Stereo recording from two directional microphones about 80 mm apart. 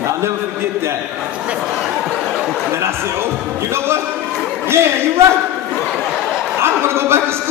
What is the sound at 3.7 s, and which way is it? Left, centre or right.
Speech, right.